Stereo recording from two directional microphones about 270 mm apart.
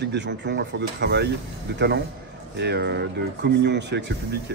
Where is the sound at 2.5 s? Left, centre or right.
Right.